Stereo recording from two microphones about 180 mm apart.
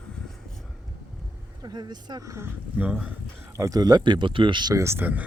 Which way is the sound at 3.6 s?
20° right (ahead or behind).